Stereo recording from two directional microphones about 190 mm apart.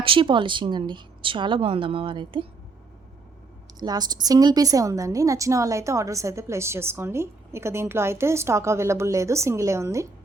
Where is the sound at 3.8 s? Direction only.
20° right (ahead or behind).